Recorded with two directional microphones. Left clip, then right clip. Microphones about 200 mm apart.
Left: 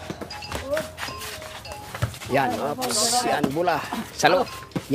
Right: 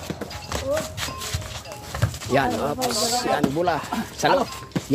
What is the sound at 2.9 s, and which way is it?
Speech, 15° left (ahead or behind).